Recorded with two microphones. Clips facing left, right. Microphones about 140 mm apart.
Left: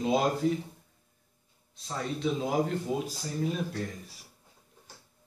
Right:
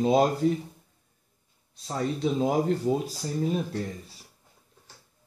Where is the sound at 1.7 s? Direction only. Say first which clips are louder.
Right 5 dB; 40° right (ahead or behind).